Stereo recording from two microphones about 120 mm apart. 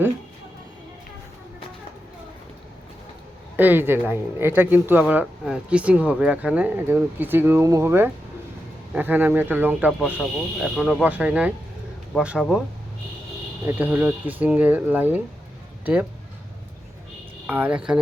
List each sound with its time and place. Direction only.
3.6 s speech: 15° right (ahead or behind)
10.2 s speech: centre (ahead or behind)
13.7 s speech: 15° right (ahead or behind)
17.4 s speech: 10° right (ahead or behind)